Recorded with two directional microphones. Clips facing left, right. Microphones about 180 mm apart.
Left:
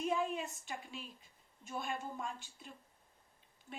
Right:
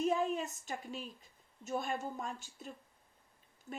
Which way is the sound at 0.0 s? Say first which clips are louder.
Right 3 dB; 40° right (ahead or behind).